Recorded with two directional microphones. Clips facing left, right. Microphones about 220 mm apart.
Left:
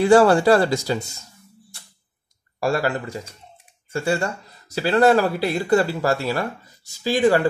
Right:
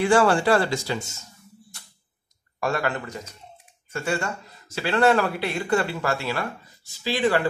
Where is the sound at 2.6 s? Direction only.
35° left (ahead or behind).